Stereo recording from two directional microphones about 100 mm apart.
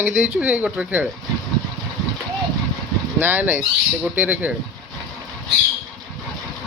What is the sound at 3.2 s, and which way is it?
Speech, 20° right (ahead or behind).